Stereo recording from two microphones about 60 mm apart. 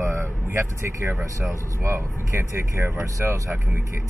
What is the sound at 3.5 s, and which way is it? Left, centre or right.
Speech, right.